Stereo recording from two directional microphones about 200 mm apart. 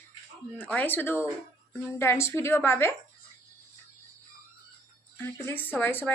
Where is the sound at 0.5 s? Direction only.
5° left (ahead or behind).